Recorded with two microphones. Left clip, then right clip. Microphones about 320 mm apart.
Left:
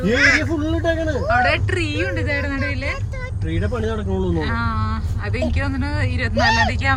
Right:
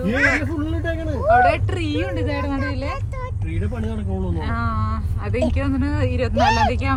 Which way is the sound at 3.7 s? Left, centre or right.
Left.